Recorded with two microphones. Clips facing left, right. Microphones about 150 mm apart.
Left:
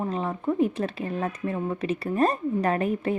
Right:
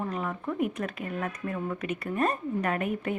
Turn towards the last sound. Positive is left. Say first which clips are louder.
# left 4 dB
turn(degrees=30)  # may be behind; listen again after turning